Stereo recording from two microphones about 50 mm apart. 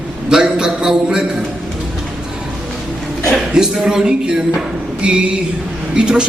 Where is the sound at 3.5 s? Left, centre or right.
Centre.